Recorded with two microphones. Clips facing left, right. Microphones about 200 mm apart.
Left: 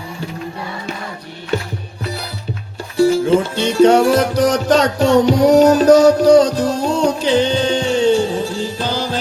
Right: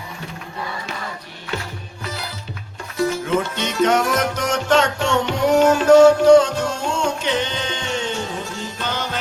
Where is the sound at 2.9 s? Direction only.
30° left (ahead or behind).